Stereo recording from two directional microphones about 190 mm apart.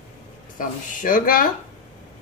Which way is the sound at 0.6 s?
45° left (ahead or behind).